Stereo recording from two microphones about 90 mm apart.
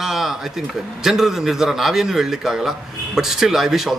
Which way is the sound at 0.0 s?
5° right (ahead or behind).